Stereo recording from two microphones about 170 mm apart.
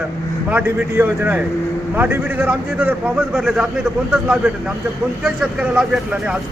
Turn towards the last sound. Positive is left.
turn(degrees=-5)  # may be behind; listen again after turning